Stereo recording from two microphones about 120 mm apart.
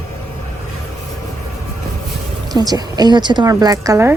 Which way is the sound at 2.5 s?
30° right (ahead or behind).